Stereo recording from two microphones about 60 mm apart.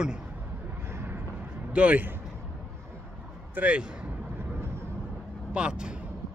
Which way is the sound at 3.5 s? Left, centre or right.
Right.